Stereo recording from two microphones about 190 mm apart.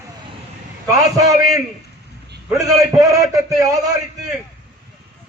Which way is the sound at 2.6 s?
20° right (ahead or behind).